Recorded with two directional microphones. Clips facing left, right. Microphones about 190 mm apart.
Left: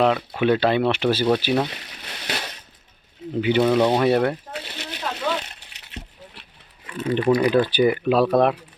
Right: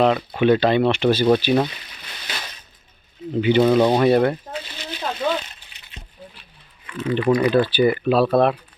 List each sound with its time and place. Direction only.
0.0 s speech: 5° left (ahead or behind)
1.7 s crumpling: 70° left (ahead or behind)
3.4 s speech: 5° left (ahead or behind)
3.7 s speech: 10° right (ahead or behind)
4.0 s speech: 5° left (ahead or behind)
4.5 s slosh: 65° left (ahead or behind)
6.8 s speech: 35° left (ahead or behind)
7.3 s speech: 10° left (ahead or behind)